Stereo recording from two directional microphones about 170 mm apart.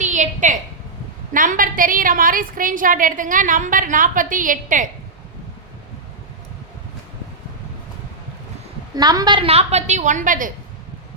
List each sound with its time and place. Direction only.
0.0 s a sound: 45° right (ahead or behind)
1.3 s a woman's voice: 50° right (ahead or behind)
9.0 s a woman's voice: 25° right (ahead or behind); by 10.5 s 50° right (ahead or behind)